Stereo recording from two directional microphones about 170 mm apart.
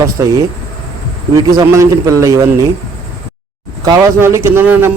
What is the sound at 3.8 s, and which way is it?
Speech, 20° right (ahead or behind).